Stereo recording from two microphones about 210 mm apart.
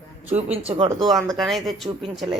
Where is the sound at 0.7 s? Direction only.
30° right (ahead or behind).